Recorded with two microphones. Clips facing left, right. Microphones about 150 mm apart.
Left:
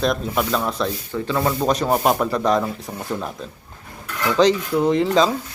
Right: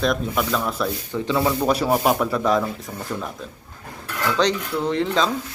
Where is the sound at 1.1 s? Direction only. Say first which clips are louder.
Right 3 dB; 15° right (ahead or behind).